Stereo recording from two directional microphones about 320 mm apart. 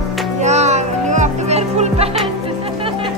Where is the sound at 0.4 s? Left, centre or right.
Right.